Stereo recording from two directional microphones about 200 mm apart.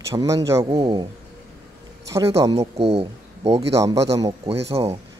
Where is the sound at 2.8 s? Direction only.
30° right (ahead or behind).